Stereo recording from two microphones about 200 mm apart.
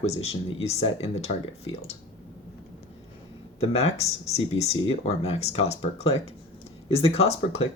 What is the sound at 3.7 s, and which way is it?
Speech, 30° left (ahead or behind).